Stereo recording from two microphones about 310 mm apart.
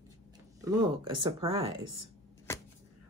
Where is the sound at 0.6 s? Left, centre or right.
Centre.